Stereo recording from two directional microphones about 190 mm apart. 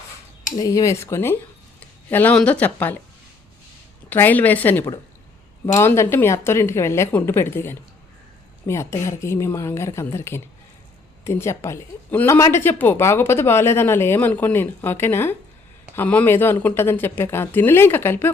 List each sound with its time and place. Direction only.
0.5 s a woman's voice: 20° left (ahead or behind)
4.1 s a woman's voice: 10° left (ahead or behind)